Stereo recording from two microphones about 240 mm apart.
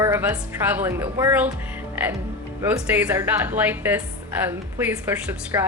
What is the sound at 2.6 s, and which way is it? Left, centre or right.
A woman's voice, centre.